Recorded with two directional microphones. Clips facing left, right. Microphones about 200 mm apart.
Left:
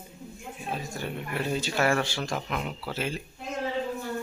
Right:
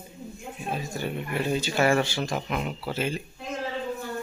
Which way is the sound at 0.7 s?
Centre (ahead or behind).